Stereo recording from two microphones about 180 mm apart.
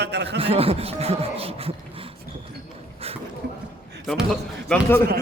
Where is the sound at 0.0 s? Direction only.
70° right (ahead or behind).